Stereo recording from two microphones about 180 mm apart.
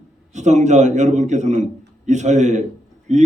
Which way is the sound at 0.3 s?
40° right (ahead or behind).